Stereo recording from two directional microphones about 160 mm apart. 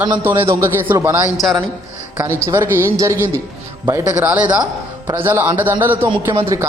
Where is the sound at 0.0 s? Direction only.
10° right (ahead or behind).